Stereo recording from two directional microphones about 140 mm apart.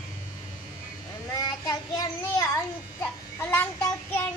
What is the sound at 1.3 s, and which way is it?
Child singing, 25° left (ahead or behind).